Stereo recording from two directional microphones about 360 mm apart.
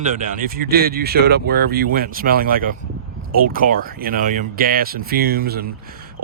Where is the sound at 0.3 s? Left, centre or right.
Right.